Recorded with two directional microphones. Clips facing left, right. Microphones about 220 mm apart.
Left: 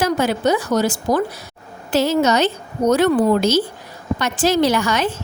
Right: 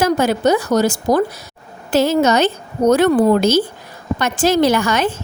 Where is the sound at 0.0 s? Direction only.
45° right (ahead or behind).